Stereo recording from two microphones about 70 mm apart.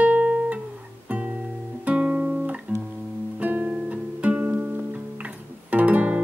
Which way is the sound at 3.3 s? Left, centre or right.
Right.